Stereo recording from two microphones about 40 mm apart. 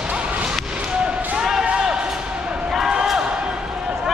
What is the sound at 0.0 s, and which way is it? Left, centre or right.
Basketball bounce, right.